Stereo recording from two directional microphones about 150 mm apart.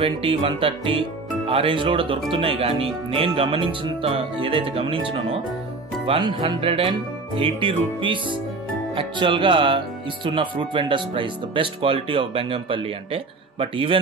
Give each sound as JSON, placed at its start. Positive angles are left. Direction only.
{"t": 0.0, "sound": "speech", "side_deg": -35}